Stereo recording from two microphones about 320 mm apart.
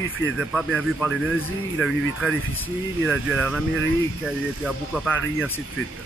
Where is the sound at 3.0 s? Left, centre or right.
Left.